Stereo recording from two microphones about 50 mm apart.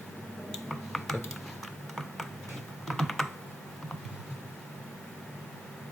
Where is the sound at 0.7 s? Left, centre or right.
Centre.